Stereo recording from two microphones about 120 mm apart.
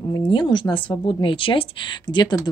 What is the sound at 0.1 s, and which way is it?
Speech, 40° left (ahead or behind).